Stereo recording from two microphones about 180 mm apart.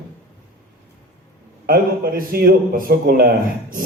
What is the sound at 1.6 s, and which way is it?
A man's voice, 55° right (ahead or behind).